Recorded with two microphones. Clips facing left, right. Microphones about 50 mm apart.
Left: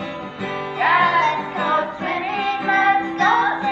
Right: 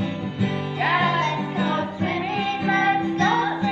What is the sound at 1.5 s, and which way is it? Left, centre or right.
Music, left.